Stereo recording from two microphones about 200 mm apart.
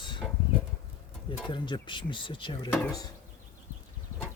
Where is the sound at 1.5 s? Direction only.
25° left (ahead or behind).